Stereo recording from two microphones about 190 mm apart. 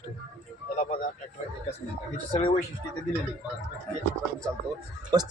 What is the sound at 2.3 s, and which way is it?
Speech, 25° left (ahead or behind).